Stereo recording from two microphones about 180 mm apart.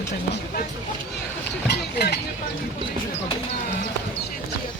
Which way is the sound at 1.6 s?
65° left (ahead or behind).